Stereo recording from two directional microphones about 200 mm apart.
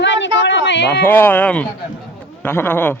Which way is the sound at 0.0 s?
65° left (ahead or behind).